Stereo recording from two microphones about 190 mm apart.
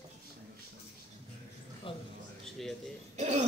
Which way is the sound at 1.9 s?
25° left (ahead or behind).